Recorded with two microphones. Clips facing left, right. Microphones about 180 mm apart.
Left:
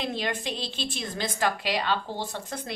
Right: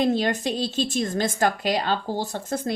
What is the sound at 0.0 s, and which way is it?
A woman's voice, 45° right (ahead or behind).